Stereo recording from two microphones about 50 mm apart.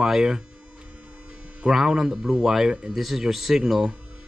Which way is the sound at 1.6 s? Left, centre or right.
Centre.